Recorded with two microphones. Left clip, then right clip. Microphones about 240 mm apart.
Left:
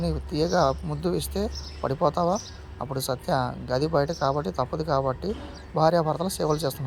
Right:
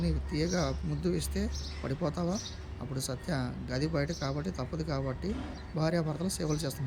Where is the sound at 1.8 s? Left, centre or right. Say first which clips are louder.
Left 12 dB; left.